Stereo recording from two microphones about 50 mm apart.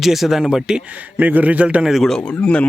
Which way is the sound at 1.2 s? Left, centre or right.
Right.